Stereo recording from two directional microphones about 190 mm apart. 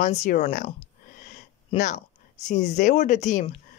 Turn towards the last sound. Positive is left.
turn(degrees=40)  # may be behind; listen again after turning